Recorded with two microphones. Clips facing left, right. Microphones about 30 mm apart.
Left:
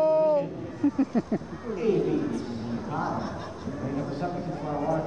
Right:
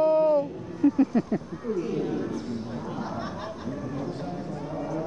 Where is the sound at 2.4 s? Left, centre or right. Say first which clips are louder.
Even; centre.